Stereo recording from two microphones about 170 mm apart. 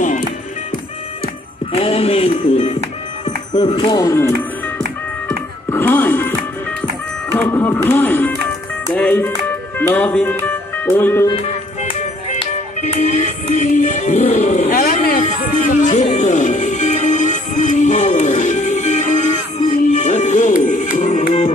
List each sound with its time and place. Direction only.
1.7 s music: 35° left (ahead or behind)
3.5 s speech: 25° left (ahead or behind)
5.7 s speech: 10° left (ahead or behind)
7.2 s music: 10° left (ahead or behind)
12.8 s music: 45° left (ahead or behind)